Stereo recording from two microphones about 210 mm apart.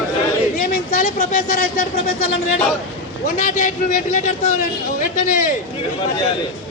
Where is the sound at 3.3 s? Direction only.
35° left (ahead or behind).